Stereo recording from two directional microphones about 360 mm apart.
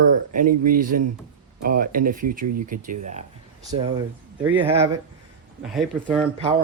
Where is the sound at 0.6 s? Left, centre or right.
Right; by 6.2 s centre.